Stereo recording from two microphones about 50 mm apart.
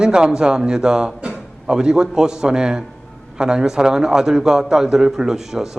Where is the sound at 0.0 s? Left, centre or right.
Centre.